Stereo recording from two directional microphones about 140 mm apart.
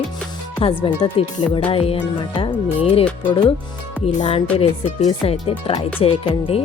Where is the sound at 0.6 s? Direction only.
40° left (ahead or behind).